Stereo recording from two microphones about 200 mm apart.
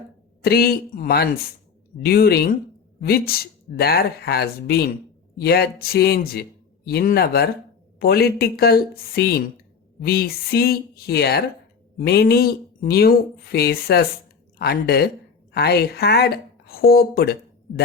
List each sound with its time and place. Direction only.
0.4 s speech: 50° left (ahead or behind)